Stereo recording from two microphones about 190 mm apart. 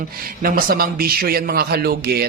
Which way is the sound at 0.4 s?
50° right (ahead or behind).